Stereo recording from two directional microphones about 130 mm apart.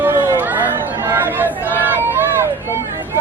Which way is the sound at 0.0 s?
15° right (ahead or behind).